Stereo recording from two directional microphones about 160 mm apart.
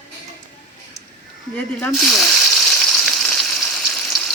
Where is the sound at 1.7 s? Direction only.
Centre (ahead or behind).